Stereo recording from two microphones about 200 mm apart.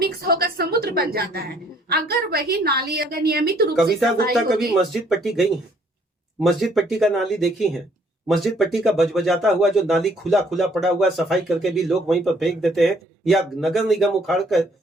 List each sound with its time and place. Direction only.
0.2 s a sound: 50° right (ahead or behind)
1.9 s a woman's voice: 50° right (ahead or behind)
4.6 s speech: centre (ahead or behind)